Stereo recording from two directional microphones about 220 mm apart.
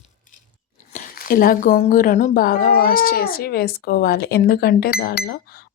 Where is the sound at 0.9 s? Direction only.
40° left (ahead or behind).